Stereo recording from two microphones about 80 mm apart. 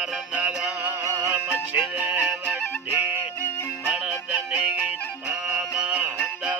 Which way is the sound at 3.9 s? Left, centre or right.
Centre.